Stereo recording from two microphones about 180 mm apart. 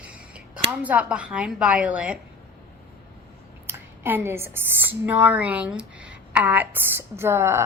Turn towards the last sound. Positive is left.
turn(degrees=-15)  # may be behind; listen again after turning